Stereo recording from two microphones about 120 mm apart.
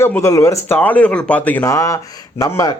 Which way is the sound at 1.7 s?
25° left (ahead or behind).